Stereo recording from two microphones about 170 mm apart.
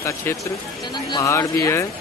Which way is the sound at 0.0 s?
15° left (ahead or behind).